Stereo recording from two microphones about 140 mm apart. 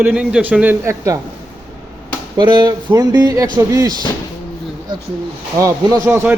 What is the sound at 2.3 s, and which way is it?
Speech, 30° right (ahead or behind).